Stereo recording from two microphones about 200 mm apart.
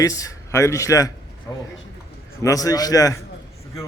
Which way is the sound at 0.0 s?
15° left (ahead or behind).